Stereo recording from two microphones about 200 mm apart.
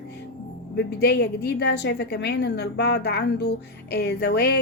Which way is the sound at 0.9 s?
55° left (ahead or behind).